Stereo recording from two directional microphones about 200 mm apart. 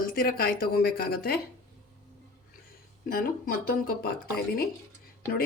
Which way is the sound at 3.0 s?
45° left (ahead or behind).